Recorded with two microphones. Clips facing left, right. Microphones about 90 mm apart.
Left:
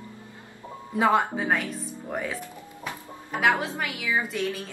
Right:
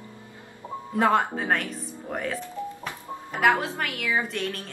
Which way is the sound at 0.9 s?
5° left (ahead or behind).